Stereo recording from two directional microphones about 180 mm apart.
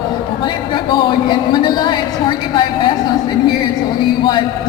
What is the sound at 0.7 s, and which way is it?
A woman's voice, 25° left (ahead or behind).